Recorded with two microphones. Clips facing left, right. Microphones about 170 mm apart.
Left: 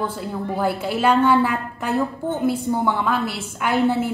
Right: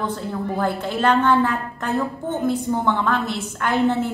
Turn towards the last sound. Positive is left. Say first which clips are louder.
# even
turn(degrees=10)  # may be behind; listen again after turning